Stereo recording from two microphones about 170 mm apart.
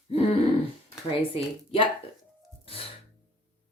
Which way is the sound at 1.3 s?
35° left (ahead or behind).